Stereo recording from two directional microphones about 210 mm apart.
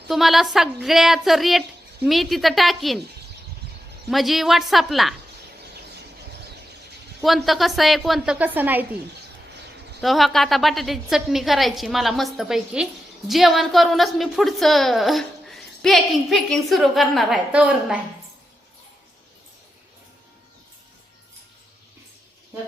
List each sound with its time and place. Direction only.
0.1 s a woman's voice: centre (ahead or behind)
4.1 s a woman's voice: centre (ahead or behind)
7.2 s a woman's voice: centre (ahead or behind)
10.0 s a woman's voice: centre (ahead or behind)